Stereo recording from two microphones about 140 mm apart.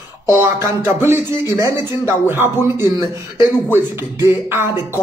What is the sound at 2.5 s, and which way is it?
Speech, 20° right (ahead or behind).